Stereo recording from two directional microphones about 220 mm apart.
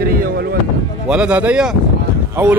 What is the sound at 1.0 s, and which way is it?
Speech, 5° right (ahead or behind).